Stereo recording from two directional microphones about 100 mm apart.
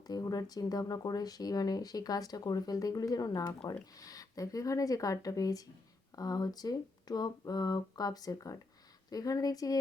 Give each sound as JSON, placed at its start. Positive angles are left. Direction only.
{"t": 0.1, "sound": "speech", "side_deg": 40}